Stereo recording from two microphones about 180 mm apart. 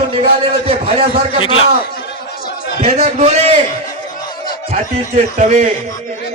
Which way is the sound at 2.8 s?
40° right (ahead or behind).